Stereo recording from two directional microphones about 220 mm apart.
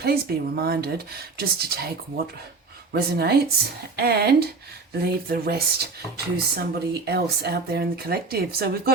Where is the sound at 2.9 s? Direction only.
45° right (ahead or behind).